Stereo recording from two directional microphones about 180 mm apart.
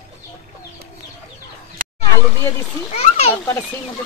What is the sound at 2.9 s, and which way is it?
Children playing, 35° left (ahead or behind).